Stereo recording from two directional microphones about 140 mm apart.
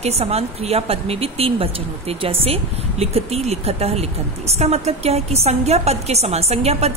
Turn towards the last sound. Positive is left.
turn(degrees=-50)  # may be behind; listen again after turning